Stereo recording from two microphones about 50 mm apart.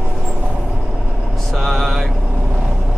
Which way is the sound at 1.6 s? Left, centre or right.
Centre.